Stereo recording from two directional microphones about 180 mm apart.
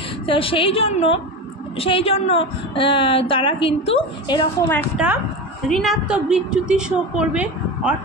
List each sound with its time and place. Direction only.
0.3 s a woman's voice: 30° left (ahead or behind)
4.9 s a woman's voice: 10° right (ahead or behind)